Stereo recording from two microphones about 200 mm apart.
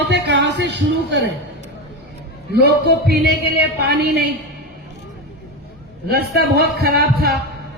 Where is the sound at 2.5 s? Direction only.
55° right (ahead or behind).